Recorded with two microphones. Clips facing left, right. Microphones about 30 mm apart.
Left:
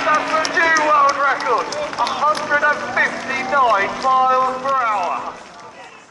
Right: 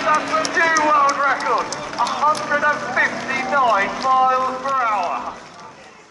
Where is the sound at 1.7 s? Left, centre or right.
Centre.